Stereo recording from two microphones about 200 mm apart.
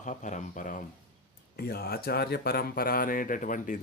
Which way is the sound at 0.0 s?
40° left (ahead or behind).